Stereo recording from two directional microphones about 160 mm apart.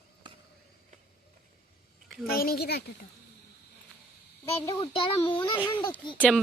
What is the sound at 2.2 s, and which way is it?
Speech, 70° left (ahead or behind).